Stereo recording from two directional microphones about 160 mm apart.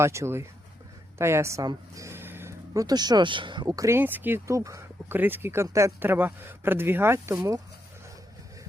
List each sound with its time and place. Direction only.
0.0 s speech: 15° right (ahead or behind)